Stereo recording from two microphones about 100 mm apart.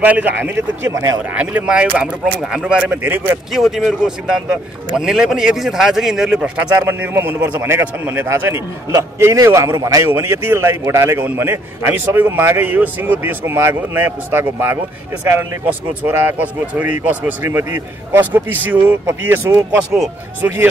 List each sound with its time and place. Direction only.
0.0 s speech: 15° right (ahead or behind)
1.3 s a man's voice: 15° right (ahead or behind)
3.5 s a man's voice: centre (ahead or behind)
6.9 s a man's voice: 20° right (ahead or behind)
8.9 s a man's voice: 30° right (ahead or behind)
10.0 s a man's voice: 25° right (ahead or behind)